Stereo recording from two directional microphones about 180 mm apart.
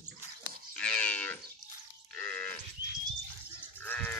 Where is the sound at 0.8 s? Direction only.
5° left (ahead or behind).